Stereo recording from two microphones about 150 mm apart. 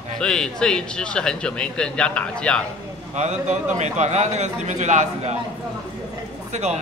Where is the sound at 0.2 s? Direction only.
5° left (ahead or behind).